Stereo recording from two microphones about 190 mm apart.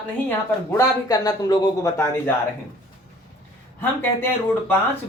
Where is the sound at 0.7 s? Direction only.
20° left (ahead or behind).